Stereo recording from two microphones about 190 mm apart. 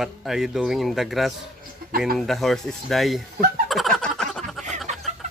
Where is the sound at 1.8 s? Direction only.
50° right (ahead or behind).